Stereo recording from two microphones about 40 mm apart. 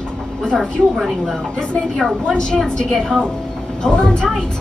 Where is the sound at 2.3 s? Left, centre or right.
Centre.